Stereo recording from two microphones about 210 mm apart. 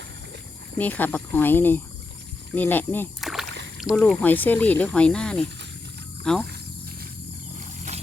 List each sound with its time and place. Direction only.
0.8 s speech: 10° left (ahead or behind)
3.2 s rowboat: centre (ahead or behind)
3.8 s speech: centre (ahead or behind)
6.4 s a sound: 50° right (ahead or behind)
7.6 s wild animals: 35° right (ahead or behind)